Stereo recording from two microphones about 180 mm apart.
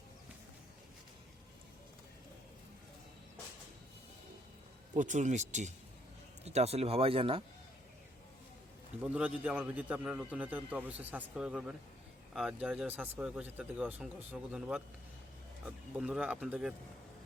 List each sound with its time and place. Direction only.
4.9 s speech: 45° right (ahead or behind)
9.0 s a man's voice: 5° right (ahead or behind)